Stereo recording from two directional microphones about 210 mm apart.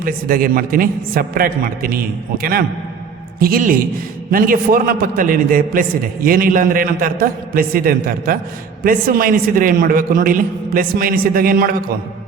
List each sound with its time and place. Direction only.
0.0 s a man's voice: 45° right (ahead or behind)